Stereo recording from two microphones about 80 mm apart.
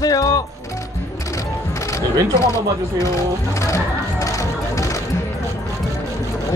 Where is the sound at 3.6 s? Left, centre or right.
Left.